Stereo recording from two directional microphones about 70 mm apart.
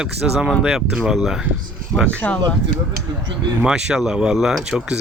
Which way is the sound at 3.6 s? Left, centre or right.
Centre.